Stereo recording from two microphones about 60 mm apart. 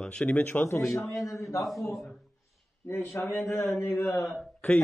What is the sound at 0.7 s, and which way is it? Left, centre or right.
Speech, left.